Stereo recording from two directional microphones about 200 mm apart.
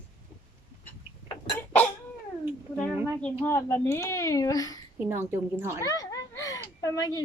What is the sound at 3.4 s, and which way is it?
A woman's voice, 10° left (ahead or behind).